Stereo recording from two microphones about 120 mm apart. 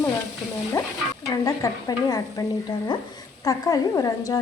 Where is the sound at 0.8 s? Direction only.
25° left (ahead or behind).